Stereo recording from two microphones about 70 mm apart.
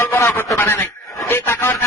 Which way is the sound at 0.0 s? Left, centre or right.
Left.